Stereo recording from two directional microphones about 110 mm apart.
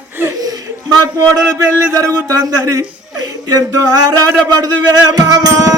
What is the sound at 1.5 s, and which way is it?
Speech, 30° right (ahead or behind).